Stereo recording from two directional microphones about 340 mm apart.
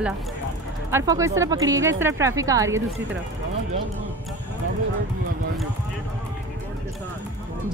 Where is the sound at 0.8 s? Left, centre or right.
Centre.